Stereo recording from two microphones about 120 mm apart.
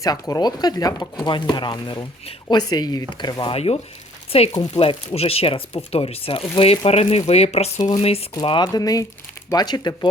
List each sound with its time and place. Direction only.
0.0 s speech: 30° left (ahead or behind)
3.5 s speech: 55° left (ahead or behind)
8.4 s speech: 40° left (ahead or behind)